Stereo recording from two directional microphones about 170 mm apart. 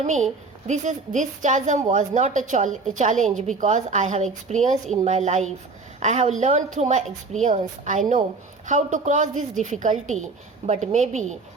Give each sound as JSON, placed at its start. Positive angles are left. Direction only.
{"t": 0.0, "sound": "a woman's voice", "side_deg": -45}